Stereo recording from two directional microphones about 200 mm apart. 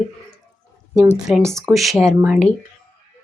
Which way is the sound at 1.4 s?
15° right (ahead or behind).